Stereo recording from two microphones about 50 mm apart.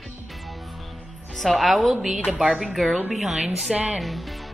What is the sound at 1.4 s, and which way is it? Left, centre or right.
Speech, centre.